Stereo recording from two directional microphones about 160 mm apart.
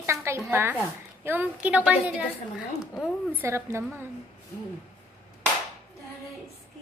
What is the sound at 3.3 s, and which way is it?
Speech, 15° right (ahead or behind).